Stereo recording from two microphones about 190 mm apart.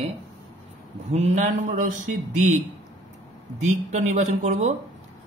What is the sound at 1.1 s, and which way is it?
Speech, 35° right (ahead or behind).